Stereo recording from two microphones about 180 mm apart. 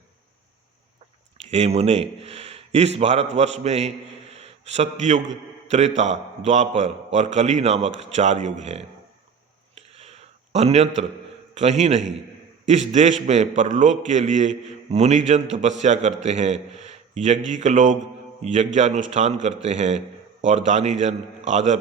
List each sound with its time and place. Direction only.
1.5 s a man's voice: 35° right (ahead or behind)
9.7 s a sound: 35° right (ahead or behind)
11.5 s a man's voice: 40° right (ahead or behind)